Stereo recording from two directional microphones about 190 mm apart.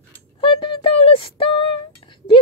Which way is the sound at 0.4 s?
25° left (ahead or behind).